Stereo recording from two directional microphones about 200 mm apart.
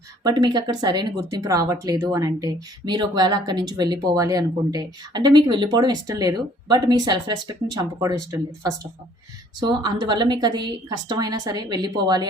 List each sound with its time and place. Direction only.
0.2 s speech: 20° right (ahead or behind)